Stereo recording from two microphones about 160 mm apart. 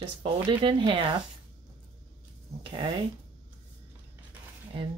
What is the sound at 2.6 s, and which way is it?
Speech, 35° right (ahead or behind).